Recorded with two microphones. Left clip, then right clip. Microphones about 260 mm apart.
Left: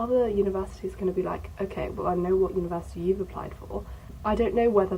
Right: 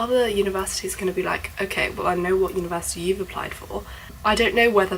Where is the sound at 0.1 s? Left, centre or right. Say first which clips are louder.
Right 2 dB; centre.